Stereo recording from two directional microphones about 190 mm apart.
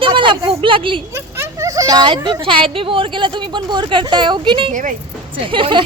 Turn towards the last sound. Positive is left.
turn(degrees=-25)  # may be behind; listen again after turning